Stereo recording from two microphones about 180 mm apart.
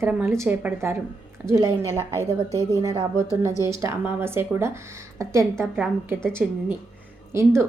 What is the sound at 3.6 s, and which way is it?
A woman's voice, 15° right (ahead or behind).